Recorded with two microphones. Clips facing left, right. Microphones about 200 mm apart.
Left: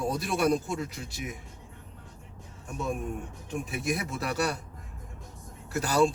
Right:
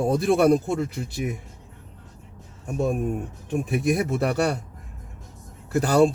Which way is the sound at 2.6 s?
55° right (ahead or behind).